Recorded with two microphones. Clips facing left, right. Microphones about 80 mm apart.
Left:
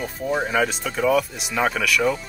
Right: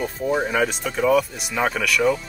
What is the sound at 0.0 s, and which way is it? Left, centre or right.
Speech, centre.